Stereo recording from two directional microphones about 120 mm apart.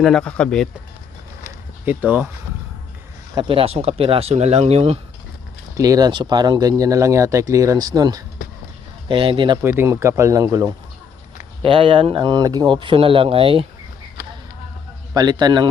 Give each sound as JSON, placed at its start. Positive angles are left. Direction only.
{"t": 0.0, "sound": "speech", "side_deg": 5}
{"t": 1.8, "sound": "speech", "side_deg": -15}
{"t": 3.4, "sound": "speech", "side_deg": -50}
{"t": 5.7, "sound": "speech", "side_deg": -30}
{"t": 9.0, "sound": "speech", "side_deg": -45}
{"t": 9.6, "sound": "speech", "side_deg": -20}
{"t": 11.6, "sound": "speech", "side_deg": -50}
{"t": 15.1, "sound": "speech", "side_deg": -35}